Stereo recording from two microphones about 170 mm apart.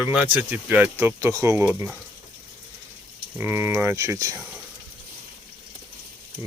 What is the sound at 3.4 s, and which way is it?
Speech, 15° right (ahead or behind).